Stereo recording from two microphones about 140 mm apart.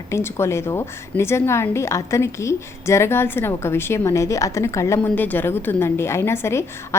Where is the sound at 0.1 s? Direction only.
20° left (ahead or behind).